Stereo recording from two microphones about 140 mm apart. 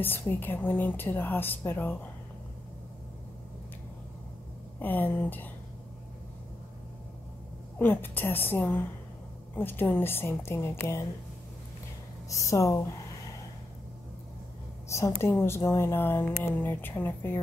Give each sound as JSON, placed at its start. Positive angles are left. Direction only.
{"t": 0.0, "sound": "a woman's voice", "side_deg": 15}
{"t": 4.7, "sound": "a woman's voice", "side_deg": 15}
{"t": 7.8, "sound": "a woman's voice", "side_deg": 15}
{"t": 12.3, "sound": "speech", "side_deg": 25}
{"t": 14.9, "sound": "a woman's voice", "side_deg": 20}